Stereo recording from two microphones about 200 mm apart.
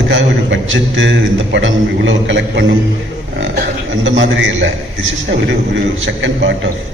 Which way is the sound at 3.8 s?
70° right (ahead or behind).